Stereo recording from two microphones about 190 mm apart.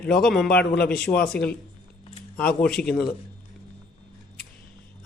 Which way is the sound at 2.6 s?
5° left (ahead or behind).